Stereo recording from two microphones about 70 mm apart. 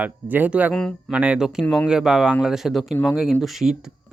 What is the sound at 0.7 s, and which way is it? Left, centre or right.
Speech, centre.